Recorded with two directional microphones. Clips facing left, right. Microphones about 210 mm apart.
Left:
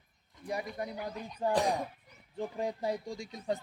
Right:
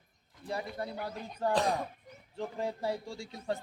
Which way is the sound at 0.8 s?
15° left (ahead or behind).